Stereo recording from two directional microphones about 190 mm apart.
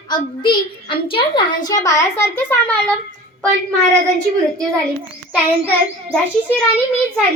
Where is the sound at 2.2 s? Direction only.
10° left (ahead or behind).